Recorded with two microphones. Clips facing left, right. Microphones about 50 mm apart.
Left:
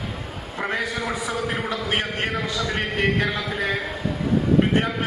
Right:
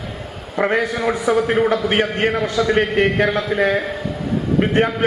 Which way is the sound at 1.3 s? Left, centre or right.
Right.